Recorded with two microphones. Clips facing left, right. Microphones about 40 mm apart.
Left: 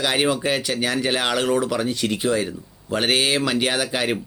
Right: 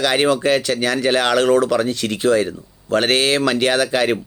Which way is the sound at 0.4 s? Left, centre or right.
Right.